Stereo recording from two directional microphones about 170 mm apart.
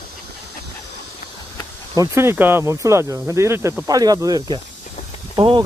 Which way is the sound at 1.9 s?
20° right (ahead or behind).